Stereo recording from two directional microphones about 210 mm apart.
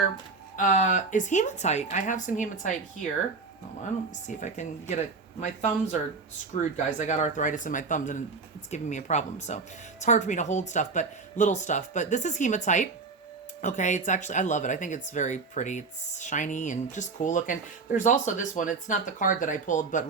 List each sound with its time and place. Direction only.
0.5 s speech: 35° left (ahead or behind)
4.1 s speech: 35° left (ahead or behind)
6.5 s speech: 35° left (ahead or behind)